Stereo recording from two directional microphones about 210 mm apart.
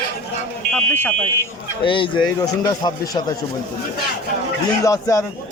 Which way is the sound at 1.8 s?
25° left (ahead or behind).